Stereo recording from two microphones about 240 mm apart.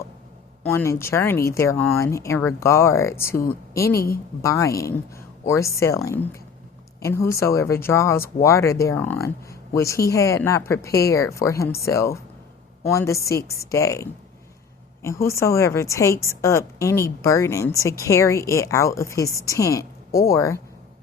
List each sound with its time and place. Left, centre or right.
0.6 s a woman's voice: centre
3.9 s a woman's voice: left
4.4 s a woman's voice: centre